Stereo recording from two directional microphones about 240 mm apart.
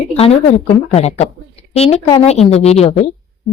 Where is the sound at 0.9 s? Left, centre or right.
Left.